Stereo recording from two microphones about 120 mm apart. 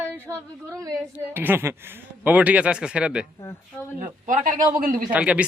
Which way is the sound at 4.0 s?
90° right.